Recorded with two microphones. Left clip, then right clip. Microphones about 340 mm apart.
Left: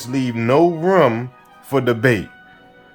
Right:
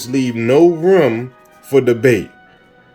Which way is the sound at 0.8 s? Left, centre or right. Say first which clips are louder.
Right 2 dB; centre.